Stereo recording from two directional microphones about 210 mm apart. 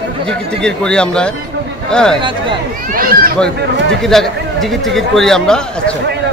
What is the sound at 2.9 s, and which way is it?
Speech, 45° right (ahead or behind).